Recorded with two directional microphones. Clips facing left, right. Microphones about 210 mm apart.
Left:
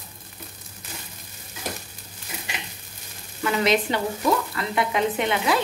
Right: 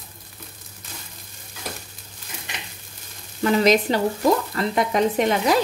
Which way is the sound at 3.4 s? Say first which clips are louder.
Right 4 dB; 40° right (ahead or behind).